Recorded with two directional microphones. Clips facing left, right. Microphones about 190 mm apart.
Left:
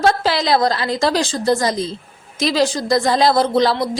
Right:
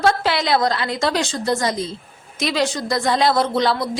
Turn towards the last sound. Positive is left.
turn(degrees=35)  # may be behind; listen again after turning